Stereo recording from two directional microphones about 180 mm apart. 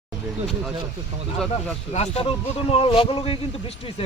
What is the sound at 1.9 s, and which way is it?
Speech, 35° left (ahead or behind).